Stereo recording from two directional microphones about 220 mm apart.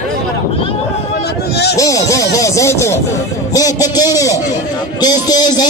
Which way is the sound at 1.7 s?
15° left (ahead or behind).